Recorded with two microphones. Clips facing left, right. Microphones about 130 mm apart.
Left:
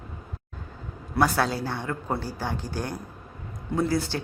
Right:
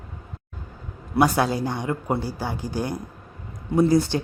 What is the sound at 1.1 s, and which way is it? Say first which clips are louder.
Speech: right 4 dB; 15° right (ahead or behind).